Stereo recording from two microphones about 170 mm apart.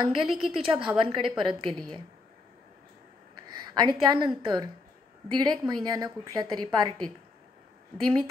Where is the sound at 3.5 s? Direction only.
25° right (ahead or behind).